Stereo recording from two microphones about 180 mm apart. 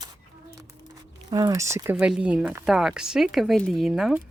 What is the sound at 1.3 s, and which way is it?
Speech, 20° right (ahead or behind).